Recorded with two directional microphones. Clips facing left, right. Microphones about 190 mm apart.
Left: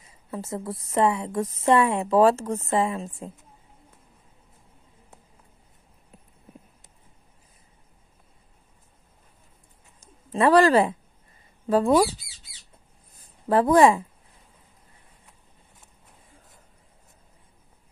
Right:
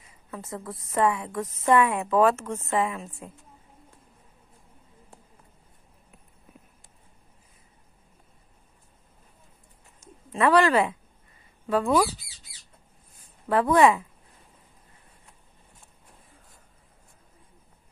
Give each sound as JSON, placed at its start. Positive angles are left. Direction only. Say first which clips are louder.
{"t": 0.0, "sound": "a woman's voice", "louder": "left 5 dB", "side_deg": 30}
{"t": 10.3, "sound": "a woman's voice", "louder": "left 3 dB", "side_deg": 35}
{"t": 13.2, "sound": "a woman's voice", "louder": "left 3 dB", "side_deg": 35}